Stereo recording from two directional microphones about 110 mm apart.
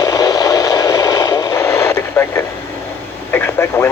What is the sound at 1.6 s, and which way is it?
Radio, 20° left (ahead or behind).